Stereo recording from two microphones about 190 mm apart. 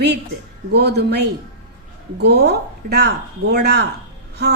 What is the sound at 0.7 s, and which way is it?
A woman's voice, 60° right (ahead or behind).